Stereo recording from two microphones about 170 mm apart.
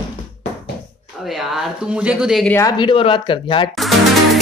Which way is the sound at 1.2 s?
Centre (ahead or behind).